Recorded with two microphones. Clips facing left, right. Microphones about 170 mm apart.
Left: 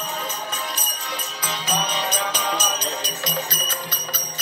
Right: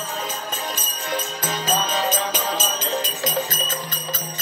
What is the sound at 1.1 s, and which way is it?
Music, 55° right (ahead or behind).